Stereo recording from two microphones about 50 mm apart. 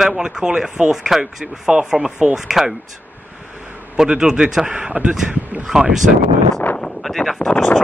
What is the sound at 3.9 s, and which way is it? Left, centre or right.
A man's voice, centre.